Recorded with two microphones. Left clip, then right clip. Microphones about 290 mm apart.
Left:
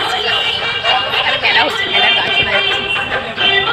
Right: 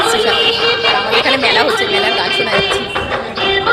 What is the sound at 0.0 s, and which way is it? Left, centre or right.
Music, right.